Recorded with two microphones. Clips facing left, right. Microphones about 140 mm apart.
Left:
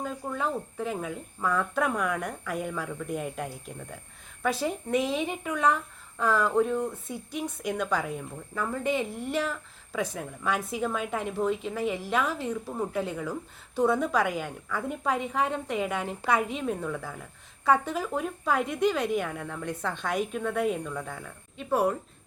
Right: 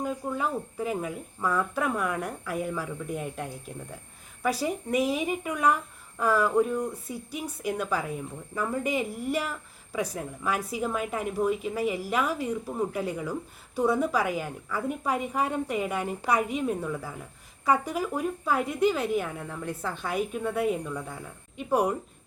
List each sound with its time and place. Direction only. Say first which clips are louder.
0.0 s a woman's voice: right 2 dB; 10° right (ahead or behind)